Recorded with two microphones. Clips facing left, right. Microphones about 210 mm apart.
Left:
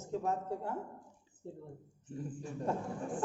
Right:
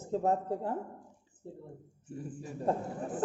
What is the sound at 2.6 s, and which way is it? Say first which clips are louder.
Speech: right 4 dB; 35° right (ahead or behind).